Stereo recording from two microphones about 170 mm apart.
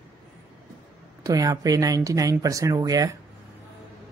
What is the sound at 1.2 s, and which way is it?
Speech, 20° right (ahead or behind).